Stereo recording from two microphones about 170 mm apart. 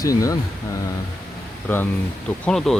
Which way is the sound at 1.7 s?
10° left (ahead or behind).